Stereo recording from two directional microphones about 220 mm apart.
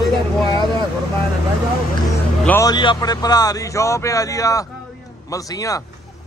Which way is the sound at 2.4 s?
10° left (ahead or behind).